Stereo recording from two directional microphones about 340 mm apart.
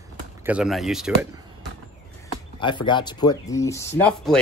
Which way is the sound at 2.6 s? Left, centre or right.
Centre.